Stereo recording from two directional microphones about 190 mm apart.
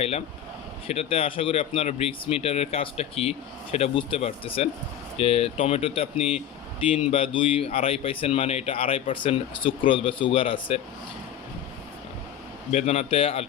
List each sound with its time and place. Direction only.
0.9 s speech: 30° left (ahead or behind)
12.7 s speech: 35° left (ahead or behind)